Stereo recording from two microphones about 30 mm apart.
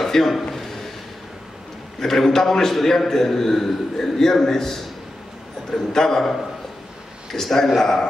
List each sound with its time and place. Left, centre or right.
0.0 s a man's voice: centre
2.0 s a man's voice: centre
7.3 s a man's voice: centre